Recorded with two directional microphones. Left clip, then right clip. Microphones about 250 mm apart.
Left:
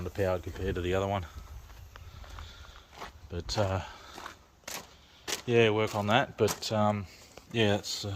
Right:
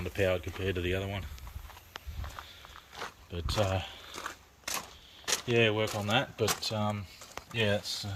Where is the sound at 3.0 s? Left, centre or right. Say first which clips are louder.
Right 1 dB; centre.